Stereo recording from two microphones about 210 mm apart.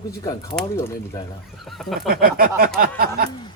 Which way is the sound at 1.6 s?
Centre (ahead or behind).